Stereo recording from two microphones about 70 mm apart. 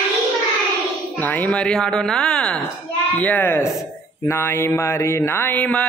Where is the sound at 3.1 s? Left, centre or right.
Left.